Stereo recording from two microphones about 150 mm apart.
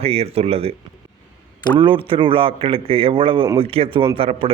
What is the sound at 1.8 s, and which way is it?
Speech, 35° right (ahead or behind).